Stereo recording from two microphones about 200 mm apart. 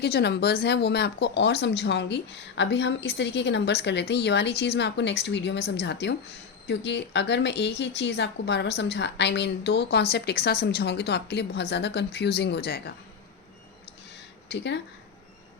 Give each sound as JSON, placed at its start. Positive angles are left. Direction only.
{"t": 0.0, "sound": "speech", "side_deg": 55}
{"t": 14.5, "sound": "speech", "side_deg": 60}